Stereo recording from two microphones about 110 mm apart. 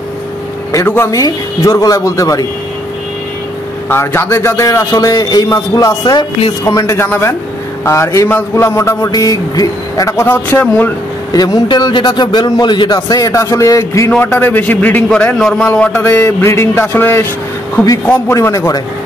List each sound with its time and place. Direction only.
0.7 s speech: 25° left (ahead or behind)
3.9 s a man's voice: 20° left (ahead or behind)
9.1 s speech: 35° left (ahead or behind); by 10.9 s 15° left (ahead or behind)
11.3 s a man's voice: 40° left (ahead or behind); by 17.3 s 20° left (ahead or behind)
18.3 s speech: 25° left (ahead or behind)